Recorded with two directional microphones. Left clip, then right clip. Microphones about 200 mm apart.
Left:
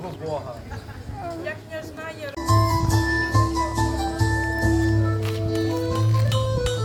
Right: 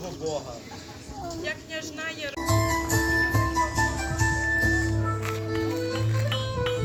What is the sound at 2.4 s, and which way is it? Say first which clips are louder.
Music: left 4 dB; 35° right (ahead or behind).